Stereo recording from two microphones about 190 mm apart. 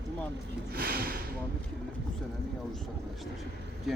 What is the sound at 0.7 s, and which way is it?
Speech, 50° right (ahead or behind).